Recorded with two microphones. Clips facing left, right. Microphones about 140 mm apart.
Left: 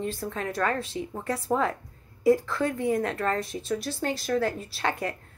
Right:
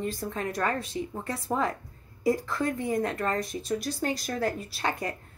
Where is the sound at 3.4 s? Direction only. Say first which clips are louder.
Even; 30° left (ahead or behind).